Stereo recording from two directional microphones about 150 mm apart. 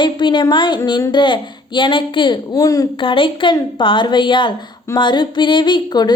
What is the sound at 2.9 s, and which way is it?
Speech, 35° left (ahead or behind).